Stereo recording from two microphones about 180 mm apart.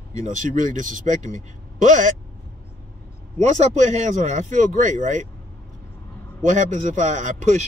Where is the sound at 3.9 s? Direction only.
40° right (ahead or behind).